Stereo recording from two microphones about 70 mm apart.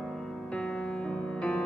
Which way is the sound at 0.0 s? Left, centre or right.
Centre.